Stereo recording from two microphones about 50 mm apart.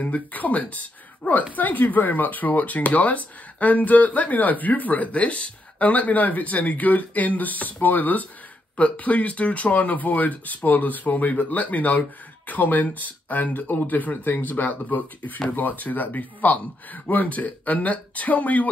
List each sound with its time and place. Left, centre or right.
0.0 s speech: left